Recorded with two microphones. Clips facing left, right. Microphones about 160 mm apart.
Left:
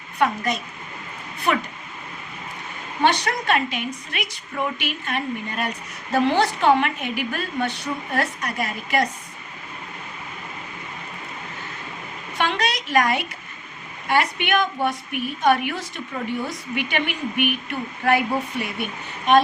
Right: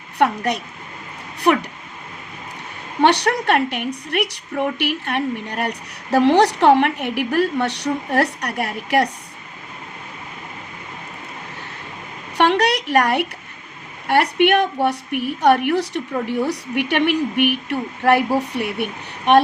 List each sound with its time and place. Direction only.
0.2 s a woman's voice: 70° right (ahead or behind)
3.0 s a woman's voice: 70° right (ahead or behind)
12.4 s a woman's voice: 70° right (ahead or behind)